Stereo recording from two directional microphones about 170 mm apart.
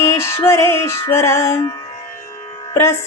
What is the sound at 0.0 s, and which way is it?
Music, 15° left (ahead or behind).